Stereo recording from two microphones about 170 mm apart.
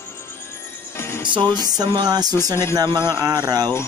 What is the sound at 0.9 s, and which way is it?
Music, 15° left (ahead or behind).